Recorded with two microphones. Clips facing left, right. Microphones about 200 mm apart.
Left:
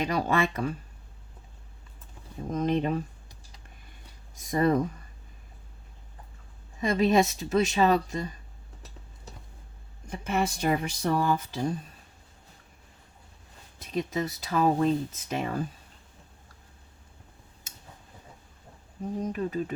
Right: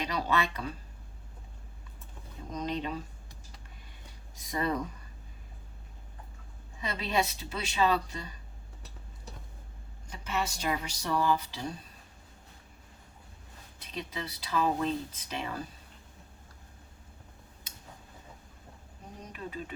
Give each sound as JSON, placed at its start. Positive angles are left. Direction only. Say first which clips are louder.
{"t": 0.0, "sound": "speech", "louder": "left 5 dB", "side_deg": 50}
{"t": 2.5, "sound": "speech", "louder": "left 8 dB", "side_deg": 50}
{"t": 4.4, "sound": "speech", "louder": "left 8 dB", "side_deg": 50}
{"t": 6.8, "sound": "speech", "louder": "left 9 dB", "side_deg": 45}
{"t": 10.1, "sound": "speech", "louder": "left 6 dB", "side_deg": 55}
{"t": 13.8, "sound": "speech", "louder": "left 9 dB", "side_deg": 45}
{"t": 19.2, "sound": "speech", "louder": "left 9 dB", "side_deg": 45}